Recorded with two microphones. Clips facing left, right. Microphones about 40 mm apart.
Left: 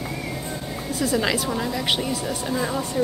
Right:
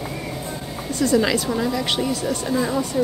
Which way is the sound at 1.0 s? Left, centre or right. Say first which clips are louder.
Right 4 dB; centre.